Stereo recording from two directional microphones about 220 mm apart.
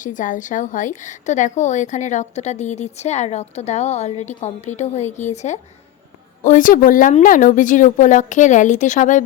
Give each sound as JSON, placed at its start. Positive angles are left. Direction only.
{"t": 0.0, "sound": "a woman's voice", "side_deg": 35}